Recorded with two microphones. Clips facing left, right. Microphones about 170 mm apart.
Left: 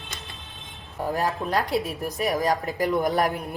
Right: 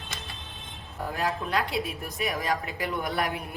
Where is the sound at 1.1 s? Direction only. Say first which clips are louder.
Left 3 dB; 40° left (ahead or behind).